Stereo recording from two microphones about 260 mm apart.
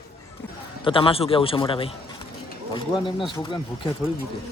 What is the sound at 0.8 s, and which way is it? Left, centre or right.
A man's voice, centre.